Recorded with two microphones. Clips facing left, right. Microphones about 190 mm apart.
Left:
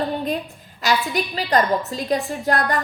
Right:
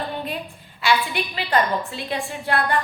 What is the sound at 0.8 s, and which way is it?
A woman's voice, 40° left (ahead or behind).